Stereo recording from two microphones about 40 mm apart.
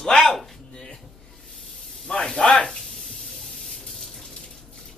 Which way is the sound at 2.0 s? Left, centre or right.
Centre.